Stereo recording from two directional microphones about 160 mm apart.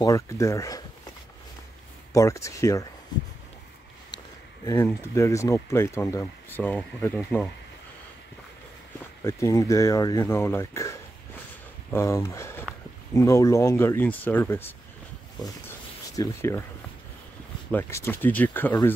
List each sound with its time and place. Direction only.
0.0 s speech: 20° left (ahead or behind)
2.1 s speech: 20° left (ahead or behind)
4.6 s speech: 15° left (ahead or behind)
9.2 s speech: 20° left (ahead or behind)
16.2 s speech: 15° left (ahead or behind)
17.6 s speech: 15° left (ahead or behind)